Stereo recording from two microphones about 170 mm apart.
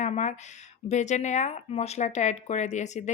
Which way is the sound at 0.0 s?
45° left (ahead or behind).